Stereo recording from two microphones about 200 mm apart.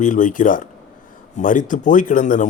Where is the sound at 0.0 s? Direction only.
40° left (ahead or behind).